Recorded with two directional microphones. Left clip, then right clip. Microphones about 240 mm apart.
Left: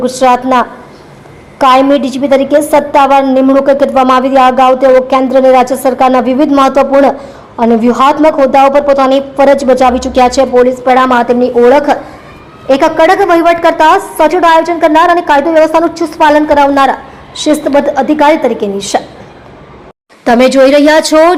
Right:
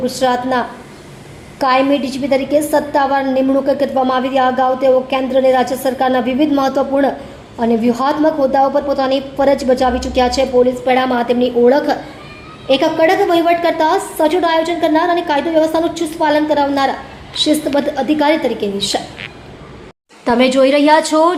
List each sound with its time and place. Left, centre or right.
0.0 s a woman's voice: left
12.8 s a woman's voice: centre
20.2 s a woman's voice: centre